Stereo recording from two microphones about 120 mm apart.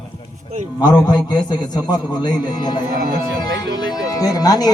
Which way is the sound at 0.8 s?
35° left (ahead or behind).